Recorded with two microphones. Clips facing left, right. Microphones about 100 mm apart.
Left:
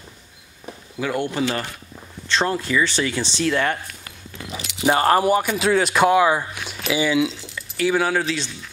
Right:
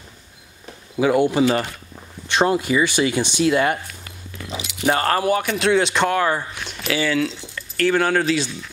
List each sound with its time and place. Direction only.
0.9 s speech: 15° right (ahead or behind)
4.8 s speech: 15° left (ahead or behind); by 8.5 s centre (ahead or behind)